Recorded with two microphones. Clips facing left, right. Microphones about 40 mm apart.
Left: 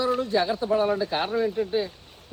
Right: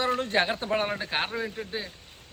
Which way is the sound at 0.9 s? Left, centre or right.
Right.